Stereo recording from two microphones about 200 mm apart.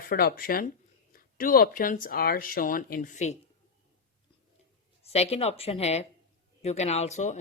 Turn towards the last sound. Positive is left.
turn(degrees=35)  # may be behind; listen again after turning